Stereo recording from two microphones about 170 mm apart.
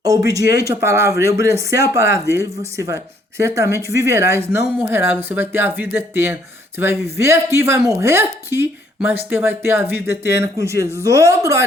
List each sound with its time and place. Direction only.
0.3 s speech: 20° right (ahead or behind)